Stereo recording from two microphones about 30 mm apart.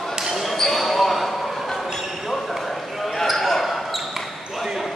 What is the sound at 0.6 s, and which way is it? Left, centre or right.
Basketball bounce, centre.